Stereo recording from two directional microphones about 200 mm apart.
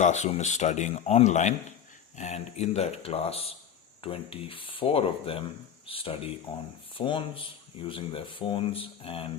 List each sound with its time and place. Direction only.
0.0 s speech: 35° left (ahead or behind)